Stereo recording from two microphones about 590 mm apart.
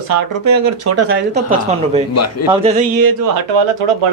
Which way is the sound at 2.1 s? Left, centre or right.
Left.